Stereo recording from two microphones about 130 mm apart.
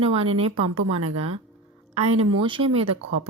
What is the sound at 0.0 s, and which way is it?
A woman's voice, 50° right (ahead or behind).